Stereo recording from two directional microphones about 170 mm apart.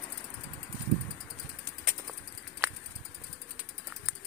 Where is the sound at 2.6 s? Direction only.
10° right (ahead or behind).